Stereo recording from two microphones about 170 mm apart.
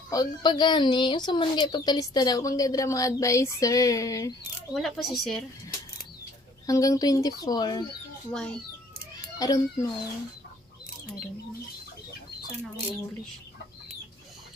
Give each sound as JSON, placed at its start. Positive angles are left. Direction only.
{"t": 0.1, "sound": "speech", "side_deg": 25}
{"t": 4.7, "sound": "a woman's voice", "side_deg": 0}
{"t": 6.7, "sound": "speech", "side_deg": 20}
{"t": 8.3, "sound": "a woman's voice", "side_deg": 5}
{"t": 9.4, "sound": "speech", "side_deg": 20}